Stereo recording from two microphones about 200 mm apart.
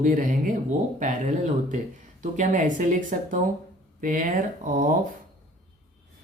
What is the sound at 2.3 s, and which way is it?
Speech, 40° right (ahead or behind).